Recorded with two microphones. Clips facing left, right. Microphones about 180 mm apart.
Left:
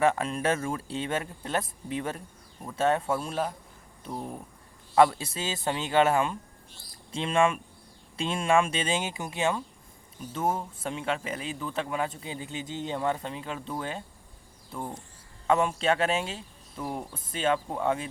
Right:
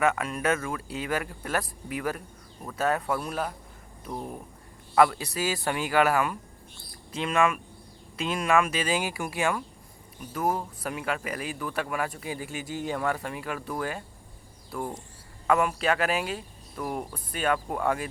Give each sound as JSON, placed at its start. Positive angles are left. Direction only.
{"t": 0.0, "sound": "speech", "side_deg": 30}
{"t": 4.9, "sound": "speech", "side_deg": 30}
{"t": 15.4, "sound": "speech", "side_deg": 25}